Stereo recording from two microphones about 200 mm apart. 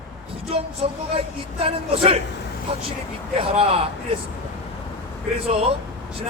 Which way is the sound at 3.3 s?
30° right (ahead or behind).